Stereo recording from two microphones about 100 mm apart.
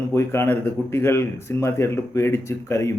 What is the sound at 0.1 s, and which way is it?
Speech, 25° left (ahead or behind).